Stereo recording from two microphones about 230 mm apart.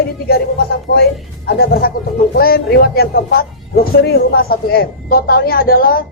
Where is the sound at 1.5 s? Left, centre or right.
Left.